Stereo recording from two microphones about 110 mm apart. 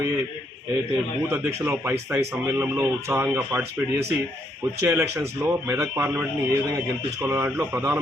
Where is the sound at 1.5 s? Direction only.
25° right (ahead or behind).